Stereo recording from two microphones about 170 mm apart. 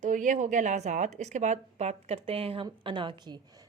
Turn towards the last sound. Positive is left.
turn(degrees=-30)  # may be behind; listen again after turning